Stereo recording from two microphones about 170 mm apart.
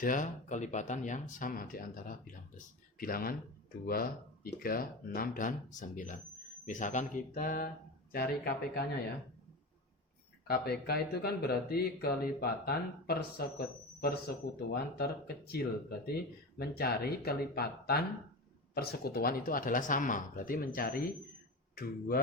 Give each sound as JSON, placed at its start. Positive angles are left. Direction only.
{"t": 0.0, "sound": "speech", "side_deg": 50}
{"t": 4.4, "sound": "speech", "side_deg": 60}
{"t": 10.4, "sound": "speech", "side_deg": 70}